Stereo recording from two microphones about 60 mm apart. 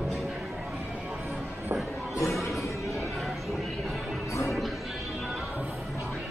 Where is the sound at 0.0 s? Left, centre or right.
Centre.